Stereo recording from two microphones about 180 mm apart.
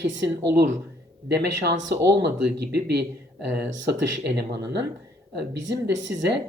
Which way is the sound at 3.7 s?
90° right.